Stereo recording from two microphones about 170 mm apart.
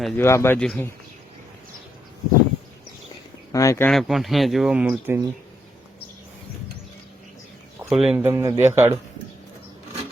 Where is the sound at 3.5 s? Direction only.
20° left (ahead or behind).